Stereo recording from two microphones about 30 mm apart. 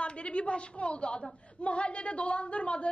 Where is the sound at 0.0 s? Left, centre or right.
Left.